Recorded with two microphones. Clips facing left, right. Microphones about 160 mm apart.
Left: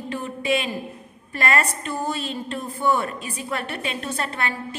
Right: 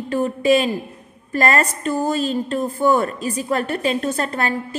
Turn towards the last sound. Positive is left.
turn(degrees=-40)  # may be behind; listen again after turning